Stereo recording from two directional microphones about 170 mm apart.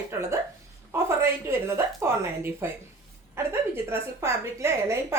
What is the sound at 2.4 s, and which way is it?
A woman's voice, 15° right (ahead or behind).